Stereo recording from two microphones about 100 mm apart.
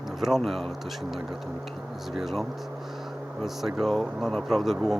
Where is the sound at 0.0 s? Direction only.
5° right (ahead or behind).